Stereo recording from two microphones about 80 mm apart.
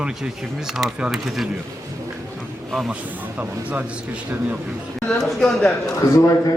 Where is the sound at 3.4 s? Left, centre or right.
Centre.